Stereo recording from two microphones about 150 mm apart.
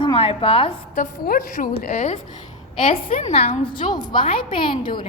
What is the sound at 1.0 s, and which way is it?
A woman's voice, 70° left (ahead or behind).